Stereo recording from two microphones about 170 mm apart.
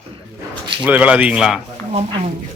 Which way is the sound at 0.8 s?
10° right (ahead or behind).